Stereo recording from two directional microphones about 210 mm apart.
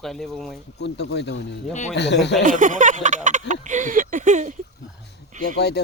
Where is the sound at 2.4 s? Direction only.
40° right (ahead or behind).